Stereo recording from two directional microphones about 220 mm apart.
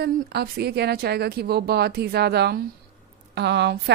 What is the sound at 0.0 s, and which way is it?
A woman's voice, 45° right (ahead or behind).